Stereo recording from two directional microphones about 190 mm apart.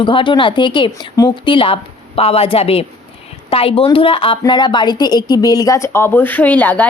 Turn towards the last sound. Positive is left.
turn(degrees=10)  # may be behind; listen again after turning